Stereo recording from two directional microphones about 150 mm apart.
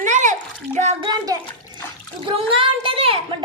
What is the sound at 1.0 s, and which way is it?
Speech, 25° right (ahead or behind).